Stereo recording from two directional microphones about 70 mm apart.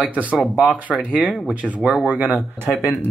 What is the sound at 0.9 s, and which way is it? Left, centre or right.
Speech, centre.